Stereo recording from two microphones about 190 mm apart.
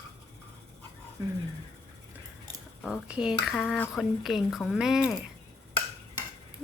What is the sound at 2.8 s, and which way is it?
Speech, 5° right (ahead or behind).